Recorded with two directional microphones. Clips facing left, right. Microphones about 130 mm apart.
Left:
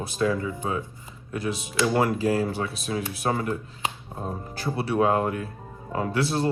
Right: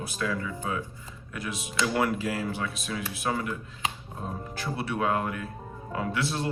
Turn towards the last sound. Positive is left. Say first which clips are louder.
# left 5 dB
turn(degrees=35)  # may be behind; listen again after turning